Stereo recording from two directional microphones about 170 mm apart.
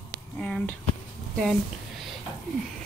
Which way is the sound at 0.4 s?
10° left (ahead or behind).